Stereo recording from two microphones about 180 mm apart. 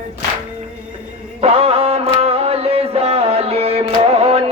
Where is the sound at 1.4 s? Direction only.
35° right (ahead or behind).